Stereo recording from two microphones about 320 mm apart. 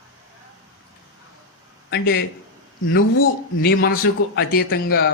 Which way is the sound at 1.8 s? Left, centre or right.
Left.